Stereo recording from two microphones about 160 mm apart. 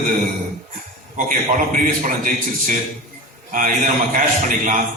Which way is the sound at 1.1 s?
55° right (ahead or behind).